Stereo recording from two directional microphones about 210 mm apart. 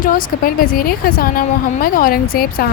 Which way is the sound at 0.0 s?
40° left (ahead or behind).